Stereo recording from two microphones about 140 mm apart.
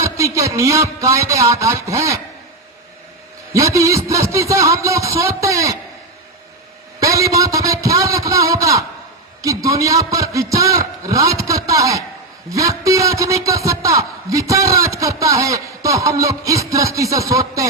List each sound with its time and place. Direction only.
0.0 s a man's voice: 20° right (ahead or behind)
3.5 s a man's voice: 20° right (ahead or behind)
7.0 s a man's voice: 25° right (ahead or behind)